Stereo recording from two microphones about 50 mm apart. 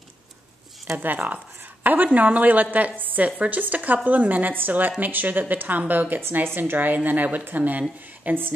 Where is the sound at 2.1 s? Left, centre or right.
Right.